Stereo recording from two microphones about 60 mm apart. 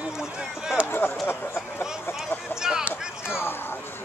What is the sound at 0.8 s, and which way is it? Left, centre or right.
Speech, left.